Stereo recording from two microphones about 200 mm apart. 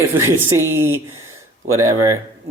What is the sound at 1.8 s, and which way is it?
Speech, 15° right (ahead or behind).